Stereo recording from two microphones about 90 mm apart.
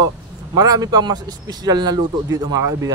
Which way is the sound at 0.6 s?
45° right (ahead or behind).